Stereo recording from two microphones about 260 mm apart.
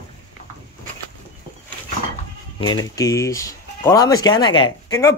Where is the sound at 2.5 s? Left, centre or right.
Centre.